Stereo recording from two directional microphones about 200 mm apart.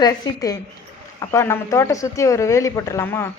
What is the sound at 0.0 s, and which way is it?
A man's voice, 20° left (ahead or behind).